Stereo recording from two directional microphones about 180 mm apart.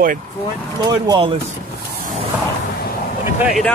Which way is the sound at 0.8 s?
25° right (ahead or behind).